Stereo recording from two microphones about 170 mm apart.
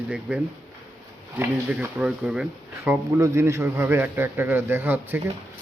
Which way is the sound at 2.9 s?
15° right (ahead or behind).